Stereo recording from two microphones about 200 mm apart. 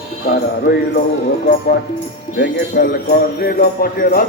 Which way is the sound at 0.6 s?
55° left (ahead or behind).